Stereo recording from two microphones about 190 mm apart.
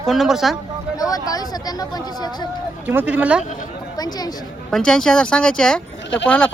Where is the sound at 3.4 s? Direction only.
40° left (ahead or behind).